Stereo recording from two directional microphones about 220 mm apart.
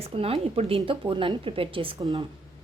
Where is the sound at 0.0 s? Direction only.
25° right (ahead or behind).